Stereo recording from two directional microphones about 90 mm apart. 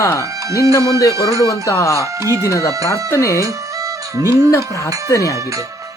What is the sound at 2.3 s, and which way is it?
Speech, 35° right (ahead or behind).